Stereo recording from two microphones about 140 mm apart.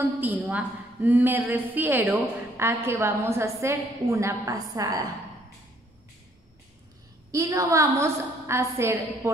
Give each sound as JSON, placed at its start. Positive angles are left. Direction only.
{"t": 0.2, "sound": "a woman's voice", "side_deg": -10}
{"t": 7.2, "sound": "a woman's voice", "side_deg": -25}